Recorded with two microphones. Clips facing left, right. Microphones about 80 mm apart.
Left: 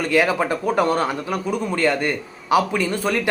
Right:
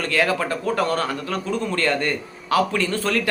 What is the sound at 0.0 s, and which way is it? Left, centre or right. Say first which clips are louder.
Speech: left 3 dB; centre.